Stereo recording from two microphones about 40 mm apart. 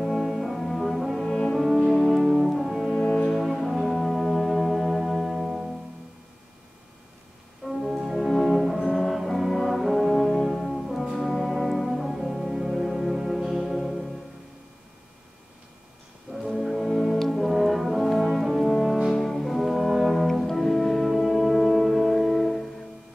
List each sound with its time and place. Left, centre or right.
0.0 s brass instrument: centre
0.6 s brass instrument: centre
1.5 s music: centre
2.2 s music: centre
2.5 s music: centre
7.6 s music: centre
8.4 s brass instrument: centre
16.3 s brass instrument: centre
19.1 s brass instrument: centre